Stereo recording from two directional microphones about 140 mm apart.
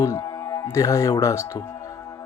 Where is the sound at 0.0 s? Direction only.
20° left (ahead or behind).